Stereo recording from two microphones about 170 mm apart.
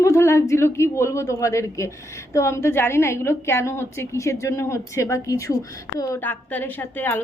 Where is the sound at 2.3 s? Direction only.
15° left (ahead or behind).